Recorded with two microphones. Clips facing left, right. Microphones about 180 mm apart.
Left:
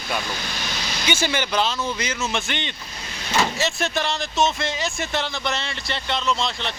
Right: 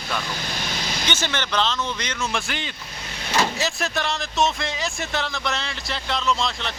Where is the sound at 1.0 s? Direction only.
10° left (ahead or behind).